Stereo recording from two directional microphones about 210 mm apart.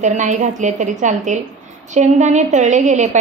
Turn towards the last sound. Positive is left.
turn(degrees=-35)  # may be behind; listen again after turning